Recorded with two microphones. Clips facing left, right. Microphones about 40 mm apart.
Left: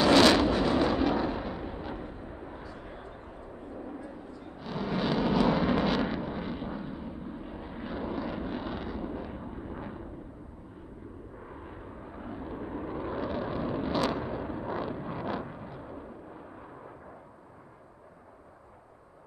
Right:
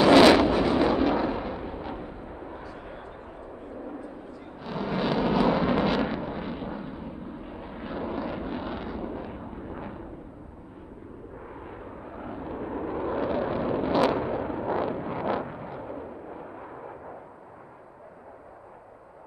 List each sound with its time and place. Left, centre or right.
0.0 s artillery fire: centre
2.7 s vehicle: centre
11.5 s vehicle: centre